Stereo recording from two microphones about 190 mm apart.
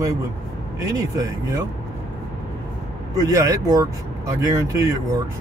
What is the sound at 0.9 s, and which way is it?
Speech, 20° right (ahead or behind).